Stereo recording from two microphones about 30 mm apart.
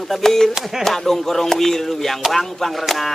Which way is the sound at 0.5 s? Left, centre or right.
Centre.